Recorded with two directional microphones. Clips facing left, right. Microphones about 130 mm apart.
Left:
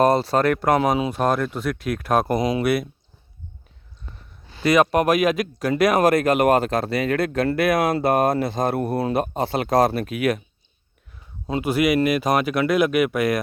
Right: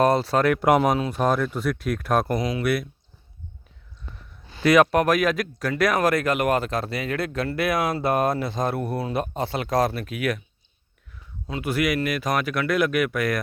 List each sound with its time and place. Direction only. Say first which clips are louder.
0.0 s speech: left 2 dB; centre (ahead or behind)
0.9 s speech: left 3 dB; 15° left (ahead or behind)
1.2 s speech: left 1 dB; centre (ahead or behind); by 2.6 s 20° left (ahead or behind)
4.6 s speech: even; centre (ahead or behind); by 6.6 s 30° left (ahead or behind)
6.6 s speech: left 5 dB; 65° left (ahead or behind)
10.1 s speech: left 4 dB; 25° left (ahead or behind)
11.4 s speech: left 4 dB; 25° left (ahead or behind)